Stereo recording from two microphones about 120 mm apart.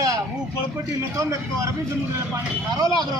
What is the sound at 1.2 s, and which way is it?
Speech, 25° right (ahead or behind).